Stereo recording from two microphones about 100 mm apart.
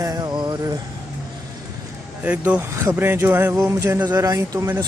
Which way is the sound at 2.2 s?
15° right (ahead or behind).